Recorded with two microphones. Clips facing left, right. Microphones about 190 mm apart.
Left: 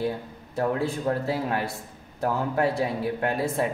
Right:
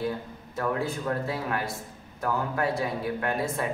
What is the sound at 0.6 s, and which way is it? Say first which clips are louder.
Speech: left 3 dB; 30° left (ahead or behind).